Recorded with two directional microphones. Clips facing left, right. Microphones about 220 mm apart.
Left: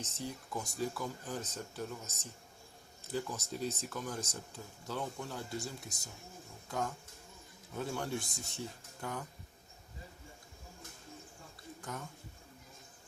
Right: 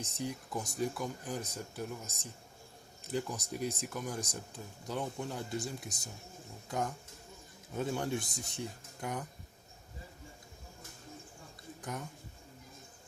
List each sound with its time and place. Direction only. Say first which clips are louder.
0.0 s speech: right 3 dB; 15° right (ahead or behind)
11.8 s speech: right 3 dB; 15° right (ahead or behind)